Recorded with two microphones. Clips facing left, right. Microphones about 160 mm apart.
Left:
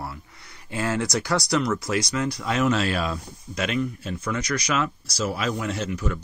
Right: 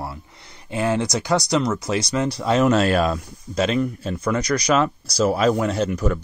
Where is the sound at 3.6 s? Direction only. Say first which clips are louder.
Right 5 dB; 35° right (ahead or behind).